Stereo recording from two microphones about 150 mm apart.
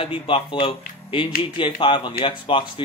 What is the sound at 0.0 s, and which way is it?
Speech, 35° left (ahead or behind).